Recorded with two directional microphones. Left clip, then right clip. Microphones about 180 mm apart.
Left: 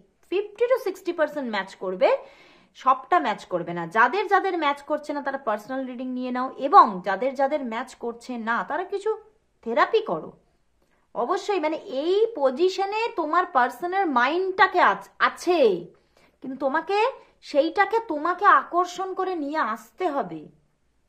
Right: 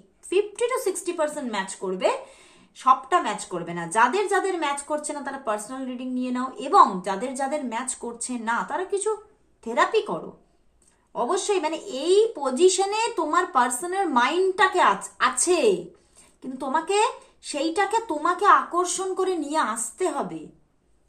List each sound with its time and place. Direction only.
0.3 s a woman's voice: 35° left (ahead or behind)
11.1 s a woman's voice: 45° left (ahead or behind)